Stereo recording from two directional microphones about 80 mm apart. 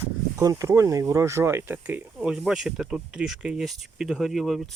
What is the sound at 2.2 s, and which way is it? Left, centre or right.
Speech, centre.